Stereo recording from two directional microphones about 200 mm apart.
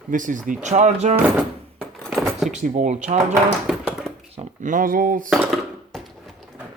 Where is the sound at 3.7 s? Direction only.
Centre (ahead or behind).